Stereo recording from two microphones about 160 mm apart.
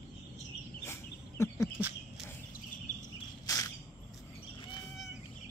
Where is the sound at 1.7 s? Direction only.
10° right (ahead or behind).